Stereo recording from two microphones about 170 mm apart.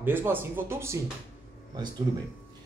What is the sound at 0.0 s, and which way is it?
Speech, 10° right (ahead or behind).